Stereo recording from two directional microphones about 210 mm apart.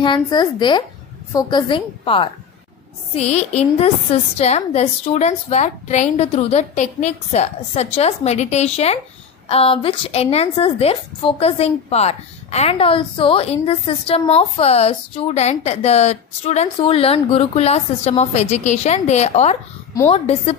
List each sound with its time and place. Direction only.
0.0 s a woman's voice: 20° left (ahead or behind)